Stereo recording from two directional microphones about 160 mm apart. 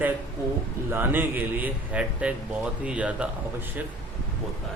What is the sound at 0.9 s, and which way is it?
Speech, 10° right (ahead or behind).